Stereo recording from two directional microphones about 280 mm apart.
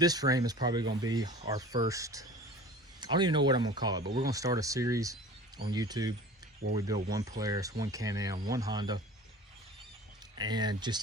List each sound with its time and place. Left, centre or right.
0.0 s speech: centre
10.3 s speech: centre